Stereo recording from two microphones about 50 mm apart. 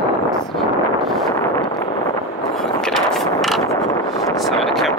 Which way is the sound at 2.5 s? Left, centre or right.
Centre.